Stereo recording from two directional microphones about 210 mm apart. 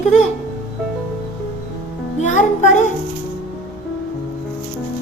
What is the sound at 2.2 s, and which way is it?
Speech, 35° left (ahead or behind).